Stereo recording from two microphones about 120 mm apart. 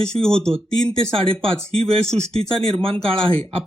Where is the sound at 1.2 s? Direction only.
50° right (ahead or behind).